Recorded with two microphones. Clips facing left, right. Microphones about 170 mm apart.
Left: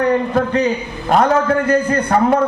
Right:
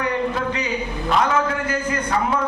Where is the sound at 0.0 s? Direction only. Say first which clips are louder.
Left 7 dB; 55° left (ahead or behind).